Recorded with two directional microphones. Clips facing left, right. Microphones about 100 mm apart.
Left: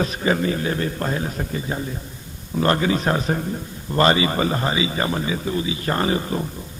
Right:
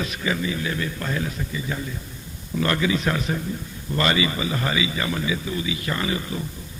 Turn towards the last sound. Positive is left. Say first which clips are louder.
# left 5 dB
turn(degrees=40)  # may be behind; listen again after turning